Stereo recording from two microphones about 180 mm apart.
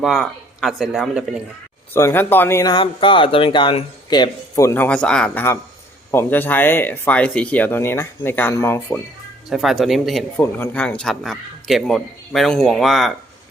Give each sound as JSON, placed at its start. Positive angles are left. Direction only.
{"t": 0.0, "sound": "speech", "side_deg": 0}
{"t": 1.9, "sound": "speech", "side_deg": 15}
{"t": 9.5, "sound": "speech", "side_deg": 0}